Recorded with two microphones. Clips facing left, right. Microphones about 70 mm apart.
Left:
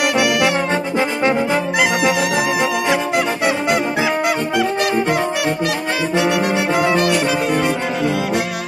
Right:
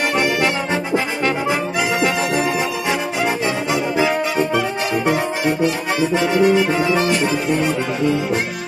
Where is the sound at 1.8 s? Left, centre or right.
Left.